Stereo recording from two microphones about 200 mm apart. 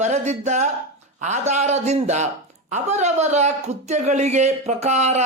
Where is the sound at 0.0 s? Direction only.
35° right (ahead or behind).